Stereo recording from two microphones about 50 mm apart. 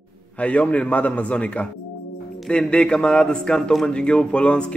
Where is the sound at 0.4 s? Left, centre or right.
Left.